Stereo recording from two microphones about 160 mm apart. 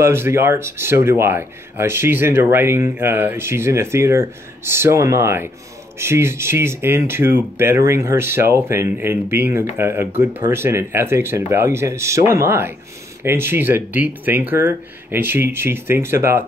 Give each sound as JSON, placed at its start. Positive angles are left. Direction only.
{"t": 0.0, "sound": "speech", "side_deg": -15}